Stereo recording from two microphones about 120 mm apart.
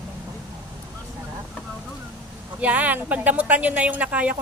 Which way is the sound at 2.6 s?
10° right (ahead or behind).